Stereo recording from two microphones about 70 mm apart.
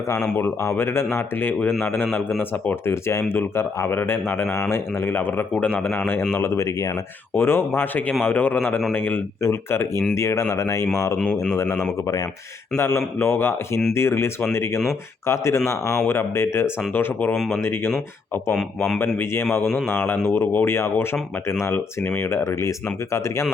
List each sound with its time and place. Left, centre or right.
0.4 s a man's voice: left
2.8 s a man's voice: left
6.3 s a man's voice: left
9.4 s a man's voice: left
11.2 s speech: centre
11.5 s a man's voice: left
18.9 s a man's voice: left